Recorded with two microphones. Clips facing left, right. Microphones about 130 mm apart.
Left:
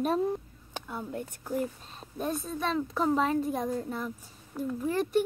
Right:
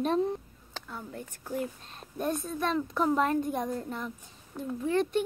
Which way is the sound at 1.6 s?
Centre (ahead or behind).